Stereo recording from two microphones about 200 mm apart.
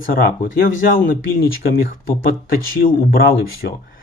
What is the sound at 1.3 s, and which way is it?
Speech, 45° left (ahead or behind).